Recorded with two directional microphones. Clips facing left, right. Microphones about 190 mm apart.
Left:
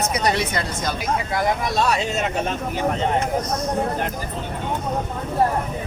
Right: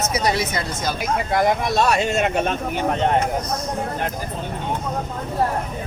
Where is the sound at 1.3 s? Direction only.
55° right (ahead or behind).